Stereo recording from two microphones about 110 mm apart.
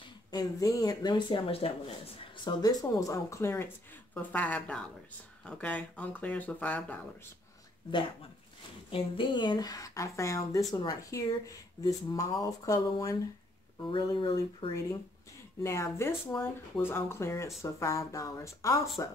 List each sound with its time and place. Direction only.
0.3 s speech: 35° left (ahead or behind); by 1.7 s 60° left (ahead or behind)
2.4 s speech: 35° left (ahead or behind)
4.1 s speech: 15° left (ahead or behind)
8.9 s speech: 50° left (ahead or behind)
15.6 s speech: 25° left (ahead or behind)